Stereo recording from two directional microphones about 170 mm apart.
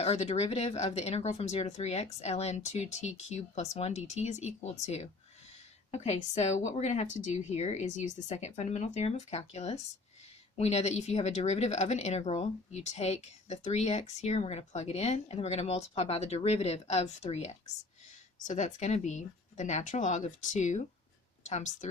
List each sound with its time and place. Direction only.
0.0 s speech: 40° left (ahead or behind)